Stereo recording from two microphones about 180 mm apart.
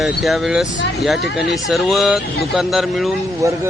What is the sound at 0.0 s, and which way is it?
Speech, centre (ahead or behind).